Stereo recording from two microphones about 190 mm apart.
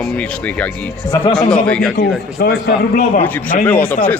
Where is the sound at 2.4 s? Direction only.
55° left (ahead or behind).